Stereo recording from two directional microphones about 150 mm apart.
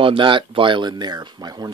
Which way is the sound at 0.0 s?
35° right (ahead or behind).